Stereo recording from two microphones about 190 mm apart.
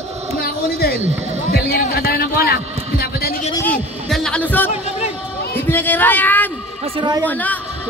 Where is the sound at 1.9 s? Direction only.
55° left (ahead or behind).